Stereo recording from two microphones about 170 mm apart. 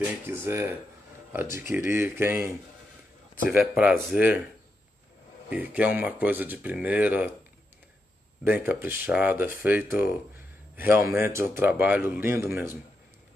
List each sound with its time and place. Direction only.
0.3 s speech: 15° right (ahead or behind)
3.5 s speech: 5° right (ahead or behind)
5.5 s speech: 10° right (ahead or behind)
8.5 s speech: 10° right (ahead or behind)